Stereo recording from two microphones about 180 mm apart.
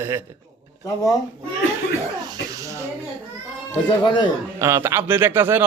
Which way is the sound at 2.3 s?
20° right (ahead or behind).